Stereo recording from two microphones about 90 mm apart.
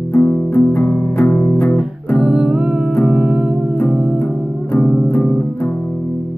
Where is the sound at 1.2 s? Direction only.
10° left (ahead or behind).